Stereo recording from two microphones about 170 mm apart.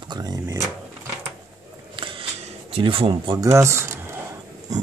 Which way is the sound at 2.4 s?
35° right (ahead or behind).